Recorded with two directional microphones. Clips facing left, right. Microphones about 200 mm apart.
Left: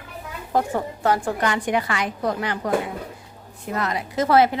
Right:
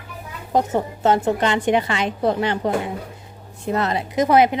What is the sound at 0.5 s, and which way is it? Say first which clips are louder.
A woman's voice: right 3 dB; 20° right (ahead or behind).